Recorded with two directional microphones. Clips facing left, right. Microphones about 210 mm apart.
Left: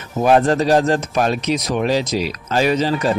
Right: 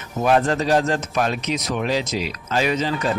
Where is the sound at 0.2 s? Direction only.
35° left (ahead or behind).